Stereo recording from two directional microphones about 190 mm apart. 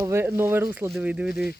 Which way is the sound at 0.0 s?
15° right (ahead or behind).